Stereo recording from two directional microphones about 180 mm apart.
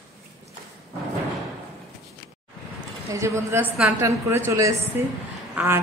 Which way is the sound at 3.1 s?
15° right (ahead or behind).